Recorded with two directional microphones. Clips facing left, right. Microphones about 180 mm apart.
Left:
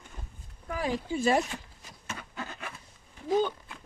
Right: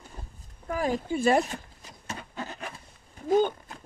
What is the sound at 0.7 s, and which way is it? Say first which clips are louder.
Speech: right 3 dB; 45° right (ahead or behind).